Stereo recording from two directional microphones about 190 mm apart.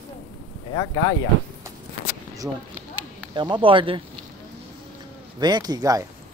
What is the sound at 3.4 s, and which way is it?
Speech, 25° right (ahead or behind).